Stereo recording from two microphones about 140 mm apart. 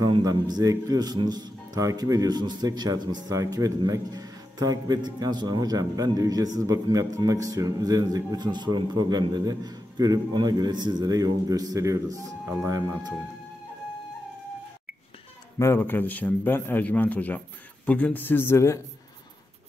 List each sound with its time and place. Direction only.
0.0 s a man's voice: 30° right (ahead or behind)
15.6 s speech: 15° left (ahead or behind)